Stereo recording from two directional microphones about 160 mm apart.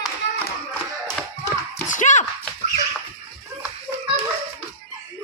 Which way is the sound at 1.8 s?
50° left (ahead or behind).